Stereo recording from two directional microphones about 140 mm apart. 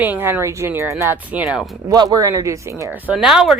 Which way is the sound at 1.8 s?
30° right (ahead or behind).